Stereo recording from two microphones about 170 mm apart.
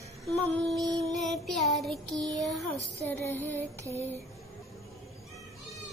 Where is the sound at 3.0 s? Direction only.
10° left (ahead or behind).